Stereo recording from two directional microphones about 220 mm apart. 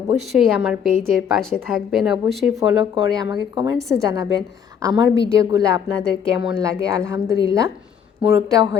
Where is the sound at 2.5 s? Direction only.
15° right (ahead or behind).